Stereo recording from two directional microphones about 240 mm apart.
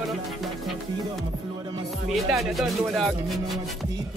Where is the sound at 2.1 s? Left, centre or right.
Centre.